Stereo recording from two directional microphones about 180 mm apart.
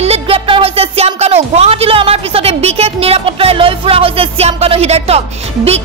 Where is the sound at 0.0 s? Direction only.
35° right (ahead or behind).